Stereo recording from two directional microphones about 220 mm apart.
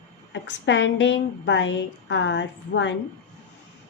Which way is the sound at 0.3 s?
55° left (ahead or behind).